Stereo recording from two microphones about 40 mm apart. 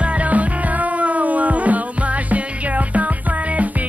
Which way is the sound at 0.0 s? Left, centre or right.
Right.